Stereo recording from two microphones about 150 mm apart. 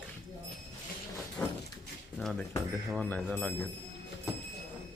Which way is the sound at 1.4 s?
10° left (ahead or behind).